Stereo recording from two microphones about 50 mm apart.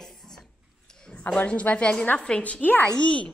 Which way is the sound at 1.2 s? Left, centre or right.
Left.